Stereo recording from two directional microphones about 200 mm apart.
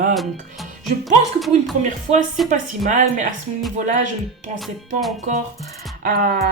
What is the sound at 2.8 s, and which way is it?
Speech, 40° right (ahead or behind).